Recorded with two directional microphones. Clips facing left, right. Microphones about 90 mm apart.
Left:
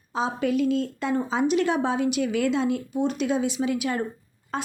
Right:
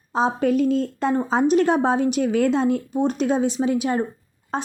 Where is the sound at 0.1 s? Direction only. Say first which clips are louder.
Right 5 dB; 40° right (ahead or behind).